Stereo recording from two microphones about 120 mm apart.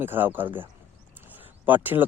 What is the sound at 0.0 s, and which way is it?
Speech, 15° right (ahead or behind).